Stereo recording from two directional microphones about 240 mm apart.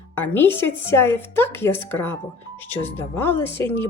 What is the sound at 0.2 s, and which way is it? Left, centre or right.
Speech, centre.